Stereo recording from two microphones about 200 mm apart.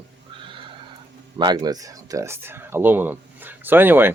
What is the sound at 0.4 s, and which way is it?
Neigh, 25° right (ahead or behind).